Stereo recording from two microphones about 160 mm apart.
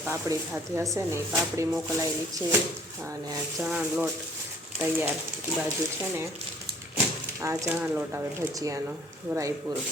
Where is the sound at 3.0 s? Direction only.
20° right (ahead or behind).